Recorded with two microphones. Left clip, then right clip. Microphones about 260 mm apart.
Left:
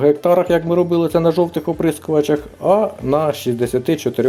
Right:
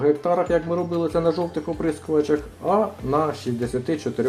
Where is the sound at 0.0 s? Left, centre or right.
Left.